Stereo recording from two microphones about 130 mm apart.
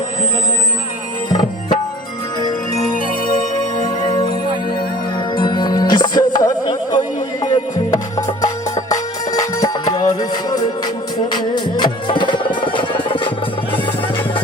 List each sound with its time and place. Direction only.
3.8 s music: 35° left (ahead or behind)
5.4 s music: 35° left (ahead or behind)